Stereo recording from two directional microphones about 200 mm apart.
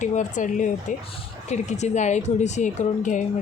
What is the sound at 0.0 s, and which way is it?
Speech, 40° left (ahead or behind).